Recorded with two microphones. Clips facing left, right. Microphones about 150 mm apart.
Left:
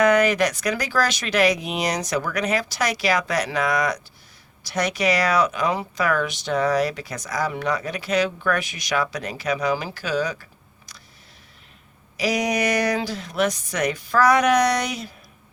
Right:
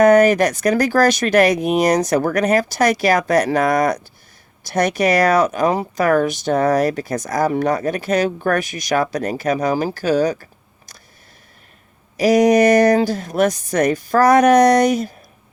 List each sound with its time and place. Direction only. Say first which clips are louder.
0.0 s speech: right 6 dB; 50° right (ahead or behind)
12.1 s speech: right 10 dB; 50° right (ahead or behind)